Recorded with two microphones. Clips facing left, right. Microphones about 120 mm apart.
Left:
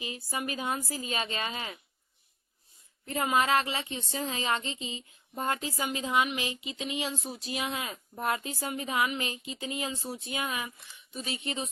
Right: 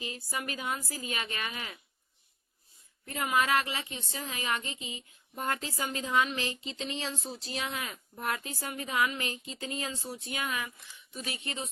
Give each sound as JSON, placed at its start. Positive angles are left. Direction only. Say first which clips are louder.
{"t": 0.0, "sound": "speech", "louder": "left 2 dB", "side_deg": 20}
{"t": 3.1, "sound": "speech", "louder": "left 2 dB", "side_deg": 25}